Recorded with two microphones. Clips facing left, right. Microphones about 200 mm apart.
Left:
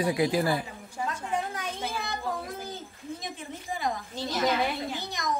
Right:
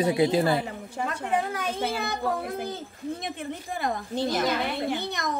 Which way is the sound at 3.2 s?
60° right (ahead or behind).